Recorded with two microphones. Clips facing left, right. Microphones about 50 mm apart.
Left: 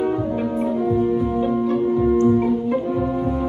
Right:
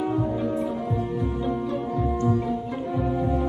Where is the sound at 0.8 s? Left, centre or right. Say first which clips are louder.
Left 8 dB; centre.